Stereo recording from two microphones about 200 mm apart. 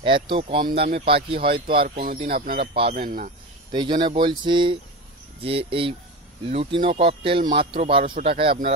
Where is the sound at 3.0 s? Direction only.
40° right (ahead or behind).